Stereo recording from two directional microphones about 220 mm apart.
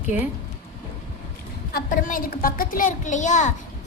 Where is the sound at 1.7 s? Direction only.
40° left (ahead or behind).